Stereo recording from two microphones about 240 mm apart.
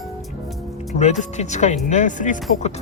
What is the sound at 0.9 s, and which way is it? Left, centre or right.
Speech, left.